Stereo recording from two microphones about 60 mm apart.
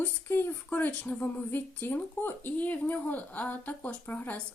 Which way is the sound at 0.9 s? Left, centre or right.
Left.